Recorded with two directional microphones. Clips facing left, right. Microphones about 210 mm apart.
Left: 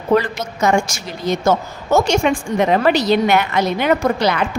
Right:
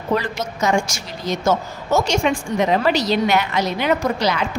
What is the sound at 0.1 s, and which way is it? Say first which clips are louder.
A woman's voice: left 6 dB; 55° left (ahead or behind).